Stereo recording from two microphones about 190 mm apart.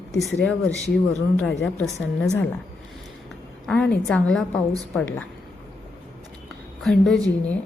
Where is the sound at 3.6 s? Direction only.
5° left (ahead or behind).